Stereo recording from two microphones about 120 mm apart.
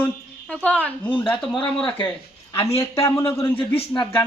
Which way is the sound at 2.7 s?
25° left (ahead or behind).